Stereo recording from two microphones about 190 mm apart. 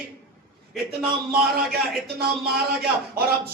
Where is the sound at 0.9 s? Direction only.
55° right (ahead or behind).